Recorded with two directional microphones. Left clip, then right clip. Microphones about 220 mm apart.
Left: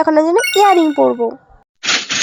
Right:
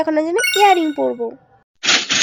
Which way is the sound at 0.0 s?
15° left (ahead or behind).